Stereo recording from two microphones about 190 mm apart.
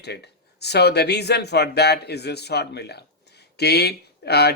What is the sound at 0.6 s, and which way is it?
Speech, 60° left (ahead or behind).